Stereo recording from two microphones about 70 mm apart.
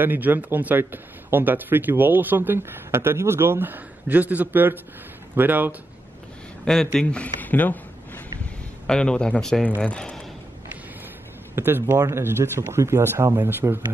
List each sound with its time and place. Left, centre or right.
0.0 s speech: right
6.6 s speech: centre
7.1 s speech: left
8.8 s a man's voice: centre
11.5 s a man's voice: right